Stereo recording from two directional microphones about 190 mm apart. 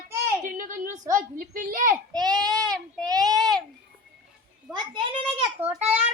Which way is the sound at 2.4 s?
20° right (ahead or behind).